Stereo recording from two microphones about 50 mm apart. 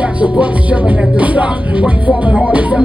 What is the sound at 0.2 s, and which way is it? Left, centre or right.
Music, right.